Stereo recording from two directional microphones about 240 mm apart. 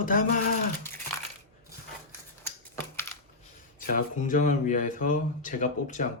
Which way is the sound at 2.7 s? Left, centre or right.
Centre.